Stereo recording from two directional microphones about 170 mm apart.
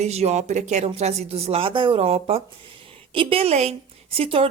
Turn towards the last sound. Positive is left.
turn(degrees=-35)  # may be behind; listen again after turning